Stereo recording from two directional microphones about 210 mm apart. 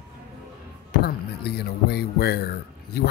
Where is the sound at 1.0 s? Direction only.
50° left (ahead or behind).